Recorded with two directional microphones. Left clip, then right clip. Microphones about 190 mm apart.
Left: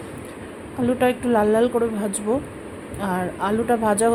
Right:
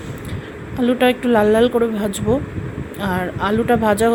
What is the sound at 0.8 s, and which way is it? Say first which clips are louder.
A woman's voice: right 4 dB; 20° right (ahead or behind).